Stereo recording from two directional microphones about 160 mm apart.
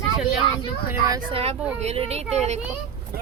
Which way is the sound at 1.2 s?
35° right (ahead or behind).